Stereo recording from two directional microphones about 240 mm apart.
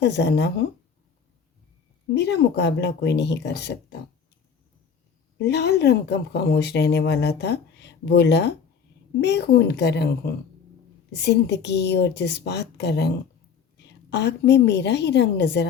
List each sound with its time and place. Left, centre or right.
0.0 s speech: left
2.1 s speech: left
5.4 s a woman's voice: left